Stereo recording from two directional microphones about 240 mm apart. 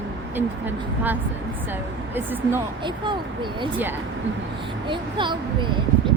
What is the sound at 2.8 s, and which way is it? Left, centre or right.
Speech, centre.